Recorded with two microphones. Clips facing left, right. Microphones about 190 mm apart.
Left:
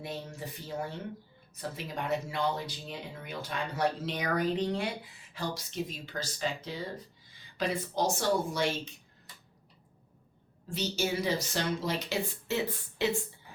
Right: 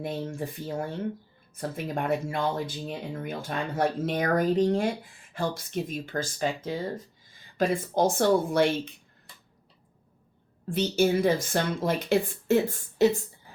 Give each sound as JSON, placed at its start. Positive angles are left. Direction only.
{"t": 0.0, "sound": "speech", "side_deg": -50}
{"t": 1.7, "sound": "speech", "side_deg": -50}
{"t": 10.7, "sound": "speech", "side_deg": -55}